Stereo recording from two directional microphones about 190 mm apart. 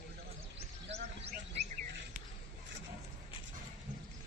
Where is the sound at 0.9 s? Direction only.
35° right (ahead or behind).